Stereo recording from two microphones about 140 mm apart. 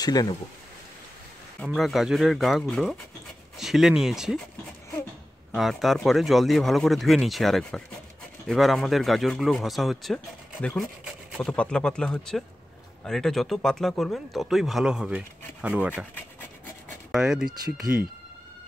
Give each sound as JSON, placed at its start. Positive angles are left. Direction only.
{"t": 0.0, "sound": "speech", "side_deg": 30}
{"t": 1.6, "sound": "speech", "side_deg": 0}
{"t": 5.5, "sound": "speech", "side_deg": 0}
{"t": 17.1, "sound": "speech", "side_deg": -5}